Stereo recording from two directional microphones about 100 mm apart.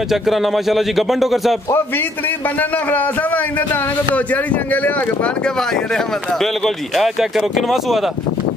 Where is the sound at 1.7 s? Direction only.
20° left (ahead or behind); by 8.1 s centre (ahead or behind).